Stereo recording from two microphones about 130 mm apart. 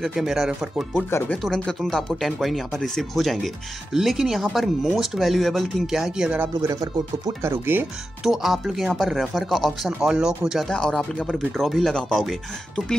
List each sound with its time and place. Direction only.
0.0 s speech: centre (ahead or behind)
6.7 s speech: 25° right (ahead or behind)
8.2 s speech: centre (ahead or behind)